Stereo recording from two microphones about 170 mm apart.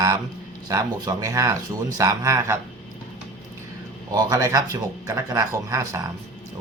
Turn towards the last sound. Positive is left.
turn(degrees=-20)  # may be behind; listen again after turning